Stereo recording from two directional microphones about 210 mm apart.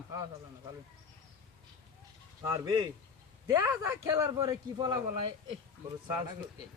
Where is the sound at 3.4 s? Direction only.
15° right (ahead or behind).